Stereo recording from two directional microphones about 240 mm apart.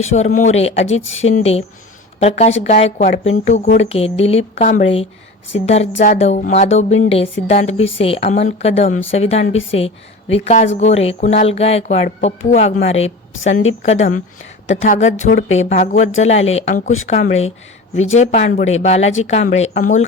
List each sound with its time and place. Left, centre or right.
0.3 s a woman's voice: left
1.0 s speech: left
1.3 s a woman's voice: left